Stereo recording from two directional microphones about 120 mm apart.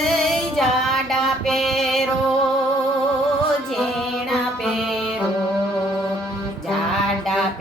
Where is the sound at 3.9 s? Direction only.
Centre (ahead or behind).